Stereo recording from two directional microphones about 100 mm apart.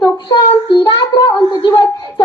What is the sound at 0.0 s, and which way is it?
Child singing, 50° left (ahead or behind).